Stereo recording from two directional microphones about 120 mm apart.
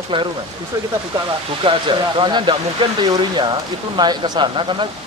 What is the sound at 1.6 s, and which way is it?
Speech, 40° right (ahead or behind).